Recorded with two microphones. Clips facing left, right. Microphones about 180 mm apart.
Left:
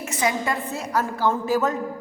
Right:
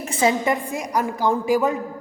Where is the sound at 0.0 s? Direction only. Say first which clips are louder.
Right 4 dB; 30° right (ahead or behind).